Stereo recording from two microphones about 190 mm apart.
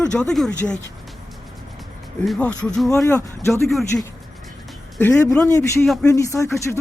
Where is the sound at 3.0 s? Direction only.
15° left (ahead or behind).